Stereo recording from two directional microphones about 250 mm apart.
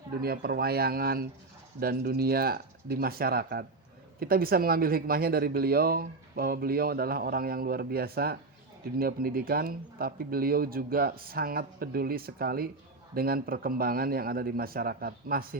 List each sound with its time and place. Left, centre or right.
0.2 s speech: right